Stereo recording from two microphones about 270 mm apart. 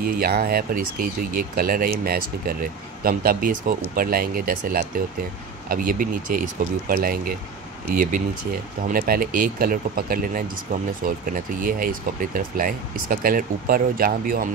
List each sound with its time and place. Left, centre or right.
0.0 s speech: right